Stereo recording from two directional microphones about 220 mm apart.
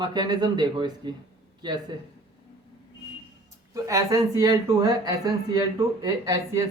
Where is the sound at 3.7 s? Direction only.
15° right (ahead or behind).